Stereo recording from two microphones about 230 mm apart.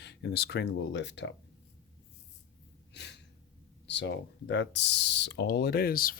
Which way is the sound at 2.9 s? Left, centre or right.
Left.